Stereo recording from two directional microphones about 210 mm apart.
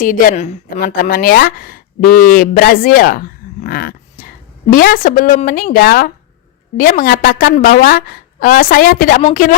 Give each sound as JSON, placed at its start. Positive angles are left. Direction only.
{"t": 0.0, "sound": "a woman's voice", "side_deg": 40}